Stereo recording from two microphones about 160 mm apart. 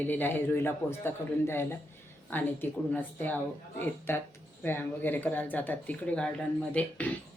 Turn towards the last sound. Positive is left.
turn(degrees=10)  # may be behind; listen again after turning